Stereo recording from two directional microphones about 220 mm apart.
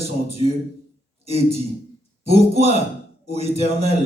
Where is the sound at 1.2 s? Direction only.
30° right (ahead or behind).